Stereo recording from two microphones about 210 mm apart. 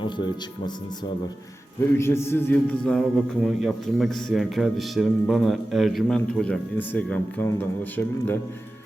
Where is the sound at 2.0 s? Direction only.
10° left (ahead or behind).